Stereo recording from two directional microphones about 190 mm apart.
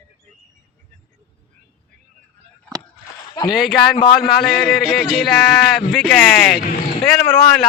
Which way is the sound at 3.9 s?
25° left (ahead or behind).